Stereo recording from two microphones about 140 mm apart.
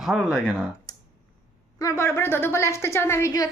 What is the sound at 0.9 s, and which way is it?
Clicking, 30° left (ahead or behind).